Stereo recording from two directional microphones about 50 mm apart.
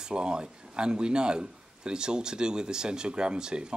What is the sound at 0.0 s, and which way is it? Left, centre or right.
A man's voice, centre.